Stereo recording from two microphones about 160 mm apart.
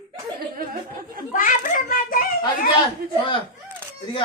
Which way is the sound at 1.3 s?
55° left (ahead or behind).